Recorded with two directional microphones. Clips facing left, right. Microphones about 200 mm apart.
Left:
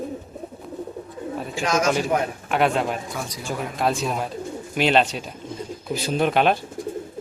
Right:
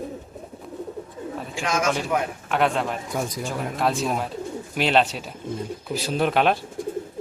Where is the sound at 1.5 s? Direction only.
35° left (ahead or behind).